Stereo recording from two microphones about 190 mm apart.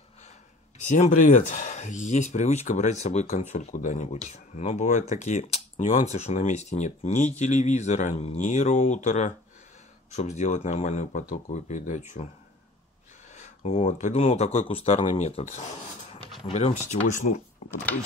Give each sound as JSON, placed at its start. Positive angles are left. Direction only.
{"t": 0.8, "sound": "speech", "side_deg": 40}
{"t": 13.3, "sound": "speech", "side_deg": 40}
{"t": 17.6, "sound": "a sound", "side_deg": 35}